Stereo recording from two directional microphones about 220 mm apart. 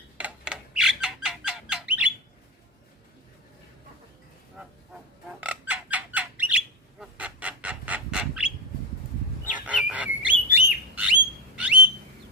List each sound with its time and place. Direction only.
0.2 s bird: 5° right (ahead or behind)
5.4 s bird: 5° right (ahead or behind)
7.0 s goose: 5° right (ahead or behind)
9.5 s bird: 5° right (ahead or behind)